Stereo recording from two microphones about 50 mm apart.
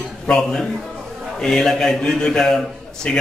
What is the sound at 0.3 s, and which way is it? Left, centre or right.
A man's voice, centre.